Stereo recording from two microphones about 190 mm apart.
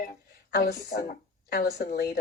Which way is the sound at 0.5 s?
55° left (ahead or behind).